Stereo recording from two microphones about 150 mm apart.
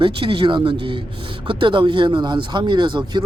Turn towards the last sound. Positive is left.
turn(degrees=-30)  # may be behind; listen again after turning